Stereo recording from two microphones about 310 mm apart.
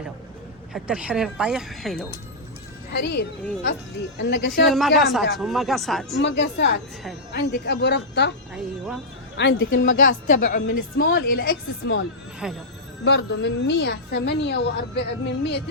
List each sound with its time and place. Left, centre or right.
0.7 s speech: centre
2.9 s a woman's voice: left
4.6 s speech: centre
6.2 s a woman's voice: left
9.4 s a woman's voice: left
12.4 s speech: centre
13.1 s a woman's voice: left